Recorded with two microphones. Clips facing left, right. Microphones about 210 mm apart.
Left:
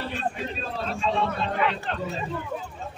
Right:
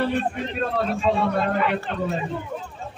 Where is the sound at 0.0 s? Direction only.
60° right (ahead or behind).